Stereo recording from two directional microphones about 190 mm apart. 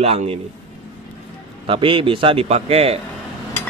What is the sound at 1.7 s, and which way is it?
Speech, 25° right (ahead or behind).